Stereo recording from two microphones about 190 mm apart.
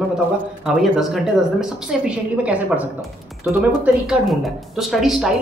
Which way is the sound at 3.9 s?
10° right (ahead or behind).